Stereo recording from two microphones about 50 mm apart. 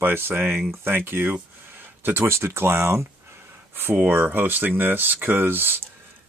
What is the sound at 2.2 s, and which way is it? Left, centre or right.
Speech, right.